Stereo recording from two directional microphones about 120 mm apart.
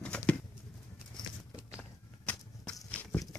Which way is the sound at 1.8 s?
10° left (ahead or behind).